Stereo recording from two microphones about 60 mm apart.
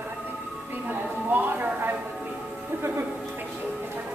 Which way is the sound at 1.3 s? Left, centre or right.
Right.